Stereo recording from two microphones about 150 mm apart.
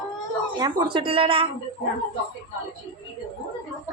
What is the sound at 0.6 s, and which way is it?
Speech, 30° right (ahead or behind).